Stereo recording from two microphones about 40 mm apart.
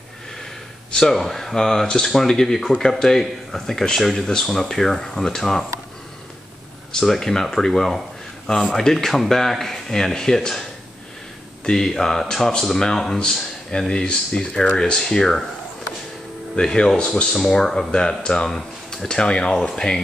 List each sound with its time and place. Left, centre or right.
0.9 s speech: centre
6.9 s speech: centre; by 14.8 s left
14.8 s speech: centre
16.5 s speech: centre
17.3 s speech: centre
17.9 s speech: left